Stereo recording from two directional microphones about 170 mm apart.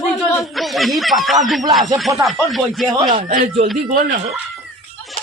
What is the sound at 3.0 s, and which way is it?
Speech, 50° right (ahead or behind).